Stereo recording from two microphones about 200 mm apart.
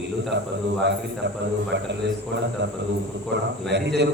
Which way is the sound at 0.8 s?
60° right (ahead or behind).